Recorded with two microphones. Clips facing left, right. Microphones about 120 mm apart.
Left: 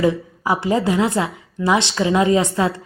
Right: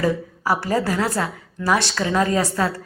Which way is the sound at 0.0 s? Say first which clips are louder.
Left 3 dB; 20° left (ahead or behind).